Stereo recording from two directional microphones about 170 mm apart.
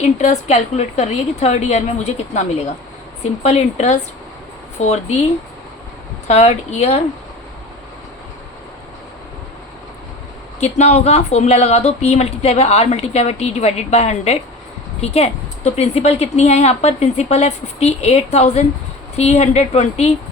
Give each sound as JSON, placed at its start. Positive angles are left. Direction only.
{"t": 0.2, "sound": "speech", "side_deg": 40}
{"t": 3.4, "sound": "speech", "side_deg": 40}
{"t": 6.2, "sound": "speech", "side_deg": 40}
{"t": 10.6, "sound": "speech", "side_deg": 40}